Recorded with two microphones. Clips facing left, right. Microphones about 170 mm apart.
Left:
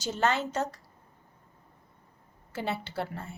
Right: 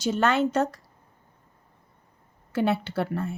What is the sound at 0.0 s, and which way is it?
Speech, 65° right (ahead or behind).